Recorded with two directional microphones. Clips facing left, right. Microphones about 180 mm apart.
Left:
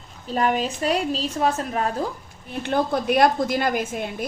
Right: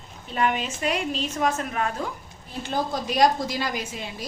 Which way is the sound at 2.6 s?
60° left (ahead or behind).